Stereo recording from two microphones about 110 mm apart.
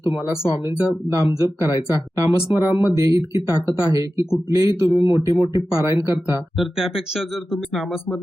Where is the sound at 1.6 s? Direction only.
30° right (ahead or behind).